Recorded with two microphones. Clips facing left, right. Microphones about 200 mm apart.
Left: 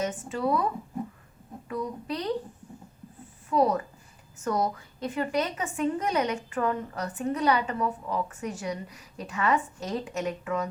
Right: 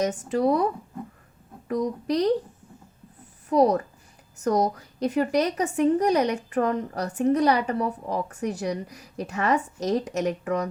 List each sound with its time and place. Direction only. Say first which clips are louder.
0.0 s a woman's voice: right 6 dB; 40° right (ahead or behind)
3.5 s a woman's voice: right 4 dB; 40° right (ahead or behind)